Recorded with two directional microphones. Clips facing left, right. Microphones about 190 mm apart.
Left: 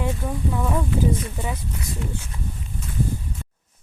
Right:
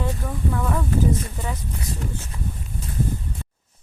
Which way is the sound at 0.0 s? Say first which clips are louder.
Left 1 dB; 15° left (ahead or behind).